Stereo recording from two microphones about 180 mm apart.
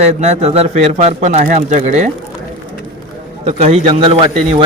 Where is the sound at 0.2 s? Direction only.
35° right (ahead or behind).